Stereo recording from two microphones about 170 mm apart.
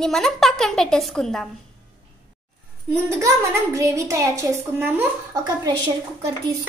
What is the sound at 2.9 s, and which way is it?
A woman's voice, 15° right (ahead or behind).